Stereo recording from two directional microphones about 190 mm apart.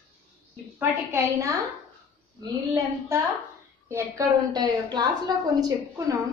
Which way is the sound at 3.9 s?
15° right (ahead or behind).